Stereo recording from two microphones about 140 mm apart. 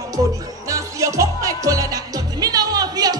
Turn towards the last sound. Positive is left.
turn(degrees=-25)  # may be behind; listen again after turning